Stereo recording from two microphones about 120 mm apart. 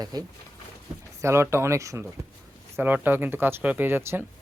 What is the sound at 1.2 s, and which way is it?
Speech, 20° right (ahead or behind).